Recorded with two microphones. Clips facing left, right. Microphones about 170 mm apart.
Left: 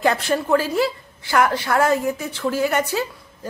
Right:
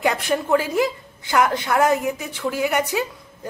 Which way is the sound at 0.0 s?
15° right (ahead or behind).